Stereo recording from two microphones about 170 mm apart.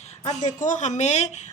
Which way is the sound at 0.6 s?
45° left (ahead or behind).